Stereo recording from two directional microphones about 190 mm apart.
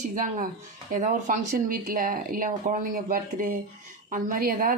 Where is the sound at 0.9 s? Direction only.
45° right (ahead or behind).